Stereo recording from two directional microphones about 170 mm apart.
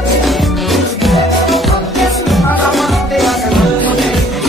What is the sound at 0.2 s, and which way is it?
Music, centre (ahead or behind).